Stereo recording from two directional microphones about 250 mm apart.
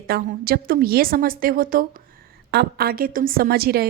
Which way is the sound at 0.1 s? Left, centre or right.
Right.